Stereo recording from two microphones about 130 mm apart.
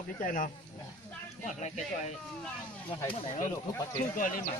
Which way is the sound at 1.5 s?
65° left (ahead or behind).